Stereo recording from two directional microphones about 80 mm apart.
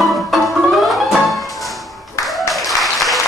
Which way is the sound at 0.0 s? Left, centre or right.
Centre.